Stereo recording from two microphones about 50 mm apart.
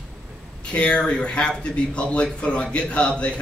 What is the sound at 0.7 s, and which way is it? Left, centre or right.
A man's voice, left.